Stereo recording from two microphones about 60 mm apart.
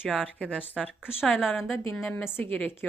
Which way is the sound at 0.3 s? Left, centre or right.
Centre.